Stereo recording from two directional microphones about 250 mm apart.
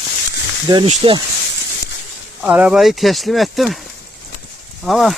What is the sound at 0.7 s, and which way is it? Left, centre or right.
Speech, centre.